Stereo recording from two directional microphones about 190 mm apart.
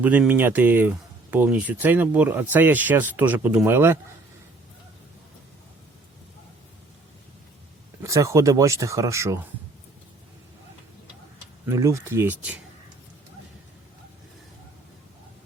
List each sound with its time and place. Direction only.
0.0 s speech: 10° right (ahead or behind)
8.0 s speech: 15° right (ahead or behind)
11.6 s speech: 15° right (ahead or behind)